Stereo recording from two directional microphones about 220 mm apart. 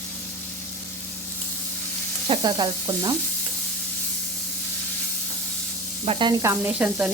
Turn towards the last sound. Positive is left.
turn(degrees=-5)  # may be behind; listen again after turning